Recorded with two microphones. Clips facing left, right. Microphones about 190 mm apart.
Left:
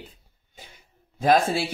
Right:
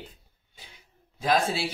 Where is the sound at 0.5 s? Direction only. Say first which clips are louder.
Left 4 dB; 50° left (ahead or behind).